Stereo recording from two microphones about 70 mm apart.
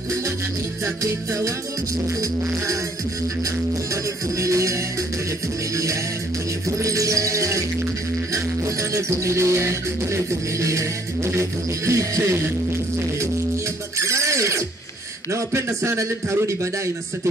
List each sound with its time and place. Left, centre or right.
3.9 s music: right
6.8 s music: right
8.9 s music: right
13.9 s music: right